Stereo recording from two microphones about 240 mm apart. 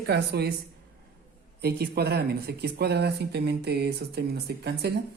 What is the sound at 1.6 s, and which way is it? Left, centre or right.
Speech, right.